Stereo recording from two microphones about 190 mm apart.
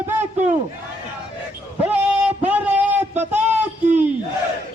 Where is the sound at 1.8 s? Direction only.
5° right (ahead or behind).